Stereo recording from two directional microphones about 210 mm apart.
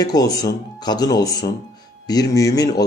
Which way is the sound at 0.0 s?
20° left (ahead or behind).